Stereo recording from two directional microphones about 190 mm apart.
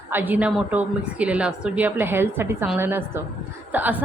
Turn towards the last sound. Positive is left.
turn(degrees=-10)  # may be behind; listen again after turning